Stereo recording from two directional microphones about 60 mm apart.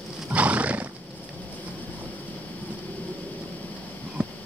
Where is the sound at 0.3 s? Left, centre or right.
Right.